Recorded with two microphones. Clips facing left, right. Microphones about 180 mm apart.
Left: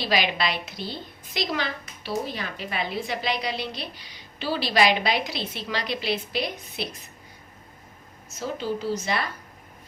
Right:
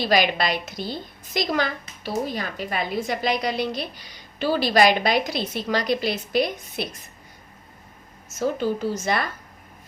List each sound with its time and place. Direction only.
0.0 s a woman's voice: 45° right (ahead or behind)
8.3 s a woman's voice: 50° right (ahead or behind)